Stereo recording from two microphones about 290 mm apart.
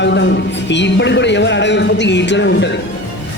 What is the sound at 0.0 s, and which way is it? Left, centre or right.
A man's voice, left.